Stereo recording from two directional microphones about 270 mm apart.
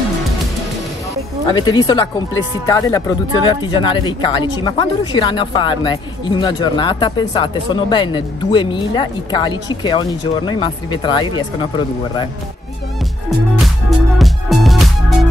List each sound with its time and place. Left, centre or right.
1.5 s a woman's voice: centre
13.8 s music: centre